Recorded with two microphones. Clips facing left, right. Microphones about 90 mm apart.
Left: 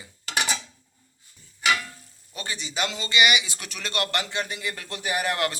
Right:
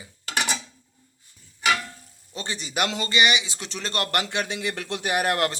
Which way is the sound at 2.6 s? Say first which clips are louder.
Right 4 dB; 50° right (ahead or behind).